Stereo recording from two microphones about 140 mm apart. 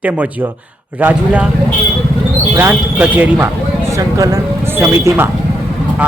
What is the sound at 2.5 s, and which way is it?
Speech, 15° right (ahead or behind).